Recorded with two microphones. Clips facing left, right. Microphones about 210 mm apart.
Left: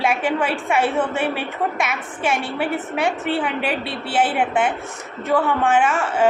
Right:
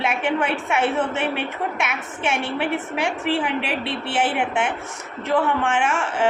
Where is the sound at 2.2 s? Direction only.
5° left (ahead or behind).